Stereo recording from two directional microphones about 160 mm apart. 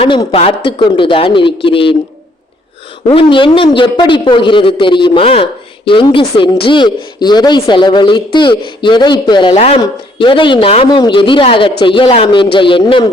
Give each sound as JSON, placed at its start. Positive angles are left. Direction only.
{"t": 0.0, "sound": "a man's voice", "side_deg": 30}
{"t": 3.1, "sound": "a man's voice", "side_deg": 35}